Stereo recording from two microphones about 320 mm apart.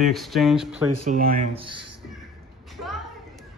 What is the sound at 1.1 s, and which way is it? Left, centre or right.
Speech, right.